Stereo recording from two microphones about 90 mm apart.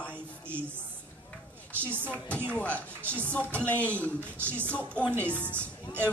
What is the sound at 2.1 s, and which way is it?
Speech, 15° left (ahead or behind).